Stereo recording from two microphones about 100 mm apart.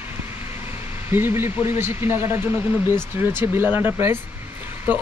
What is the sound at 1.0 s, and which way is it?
Speech, 20° right (ahead or behind).